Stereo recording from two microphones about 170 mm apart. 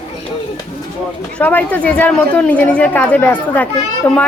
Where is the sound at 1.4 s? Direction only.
10° left (ahead or behind).